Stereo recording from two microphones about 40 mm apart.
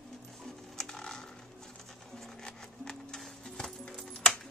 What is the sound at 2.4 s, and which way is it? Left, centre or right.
Music, centre.